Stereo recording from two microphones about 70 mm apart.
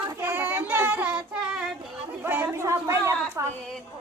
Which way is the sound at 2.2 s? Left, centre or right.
Right.